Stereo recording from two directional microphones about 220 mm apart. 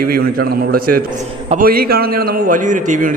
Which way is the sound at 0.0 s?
40° right (ahead or behind).